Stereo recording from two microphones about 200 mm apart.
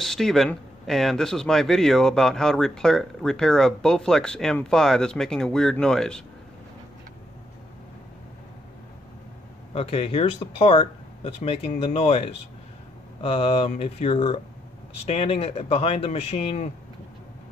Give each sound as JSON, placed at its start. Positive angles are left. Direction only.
{"t": 0.0, "sound": "speech", "side_deg": 0}
{"t": 9.8, "sound": "speech", "side_deg": 30}